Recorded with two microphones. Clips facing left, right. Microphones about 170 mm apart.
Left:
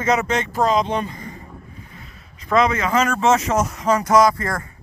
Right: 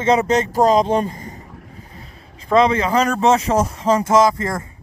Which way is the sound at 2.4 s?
30° right (ahead or behind).